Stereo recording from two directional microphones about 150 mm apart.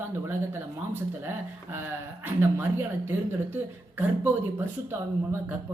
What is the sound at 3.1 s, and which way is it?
Speech, 15° right (ahead or behind).